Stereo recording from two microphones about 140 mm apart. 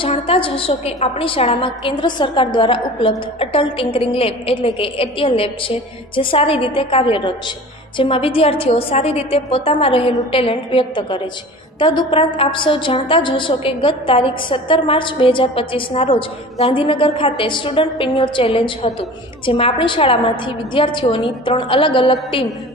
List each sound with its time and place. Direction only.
0.0 s a woman's voice: 40° left (ahead or behind)